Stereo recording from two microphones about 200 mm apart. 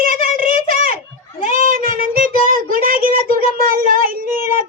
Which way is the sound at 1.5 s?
45° right (ahead or behind).